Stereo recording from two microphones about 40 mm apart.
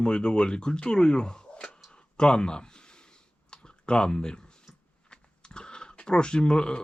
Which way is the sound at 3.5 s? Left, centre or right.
Left.